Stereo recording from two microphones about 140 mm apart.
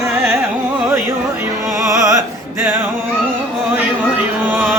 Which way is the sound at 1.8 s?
20° right (ahead or behind).